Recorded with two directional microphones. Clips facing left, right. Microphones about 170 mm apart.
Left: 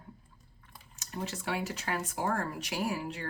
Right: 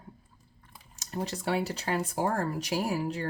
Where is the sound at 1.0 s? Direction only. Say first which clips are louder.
Right 4 dB; 40° right (ahead or behind).